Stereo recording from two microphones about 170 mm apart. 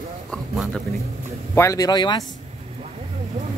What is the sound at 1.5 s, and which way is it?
Speech, 20° left (ahead or behind).